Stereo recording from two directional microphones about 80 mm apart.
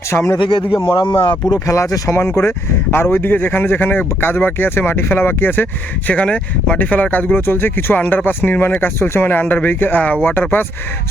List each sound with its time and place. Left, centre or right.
0.1 s speech: left
0.3 s speech: left
0.8 s speech: left
1.5 s speech: left
6.1 s speech: centre